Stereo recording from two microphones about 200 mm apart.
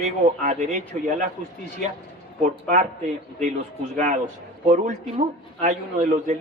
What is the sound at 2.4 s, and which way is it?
Speech, 40° right (ahead or behind).